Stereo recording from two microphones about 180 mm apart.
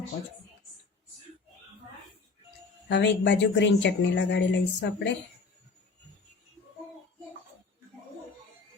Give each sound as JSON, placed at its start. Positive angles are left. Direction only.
{"t": 2.9, "sound": "speech", "side_deg": 80}